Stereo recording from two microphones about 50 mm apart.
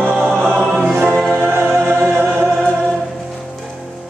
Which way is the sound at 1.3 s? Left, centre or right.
Right.